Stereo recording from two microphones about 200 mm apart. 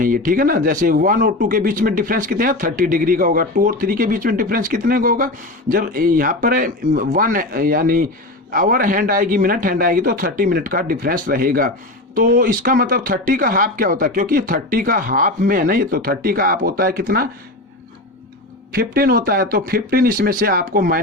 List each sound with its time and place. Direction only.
0.0 s speech: 45° right (ahead or behind)
18.7 s speech: 50° right (ahead or behind)